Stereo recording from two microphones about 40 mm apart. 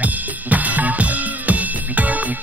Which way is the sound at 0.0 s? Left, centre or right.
Right.